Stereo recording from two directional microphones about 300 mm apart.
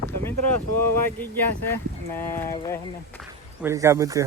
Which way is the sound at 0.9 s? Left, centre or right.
Centre.